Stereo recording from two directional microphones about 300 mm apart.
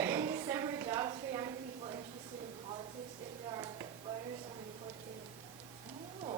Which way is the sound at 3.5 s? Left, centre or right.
Centre.